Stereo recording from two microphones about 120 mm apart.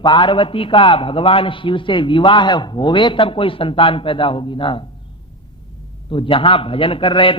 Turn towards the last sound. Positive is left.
turn(degrees=45)  # may be behind; listen again after turning